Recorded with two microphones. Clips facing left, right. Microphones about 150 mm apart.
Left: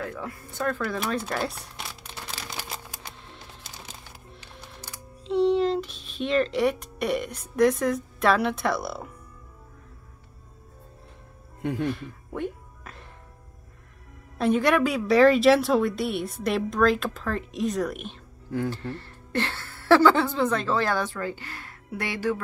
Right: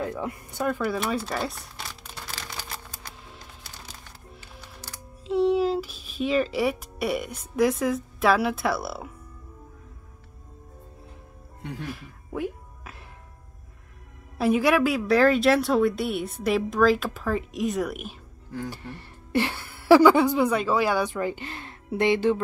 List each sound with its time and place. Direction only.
0.0 s speech: 20° right (ahead or behind)
1.2 s crumpling: centre (ahead or behind)
2.7 s music: 10° left (ahead or behind)
5.2 s speech: 5° right (ahead or behind)
11.6 s speech: 50° left (ahead or behind)
11.9 s music: 5° right (ahead or behind)
14.4 s a woman's voice: 5° right (ahead or behind); by 22.4 s 20° right (ahead or behind)